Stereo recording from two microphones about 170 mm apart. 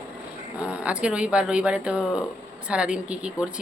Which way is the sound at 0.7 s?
5° right (ahead or behind).